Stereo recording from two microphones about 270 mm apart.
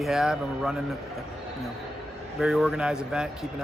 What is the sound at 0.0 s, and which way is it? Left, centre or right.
Speech, centre.